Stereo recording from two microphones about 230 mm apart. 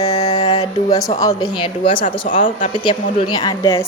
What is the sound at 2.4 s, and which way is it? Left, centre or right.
Speech, left.